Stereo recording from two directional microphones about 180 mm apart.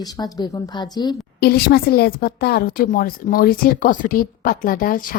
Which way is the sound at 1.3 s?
60° left (ahead or behind).